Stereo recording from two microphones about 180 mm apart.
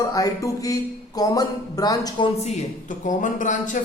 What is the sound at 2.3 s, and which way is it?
Speech, 35° left (ahead or behind).